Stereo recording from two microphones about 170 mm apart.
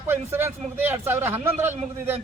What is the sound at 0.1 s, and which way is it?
A man's voice, 15° right (ahead or behind).